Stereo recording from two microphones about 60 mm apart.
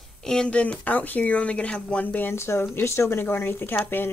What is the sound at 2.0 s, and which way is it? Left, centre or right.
Speech, left.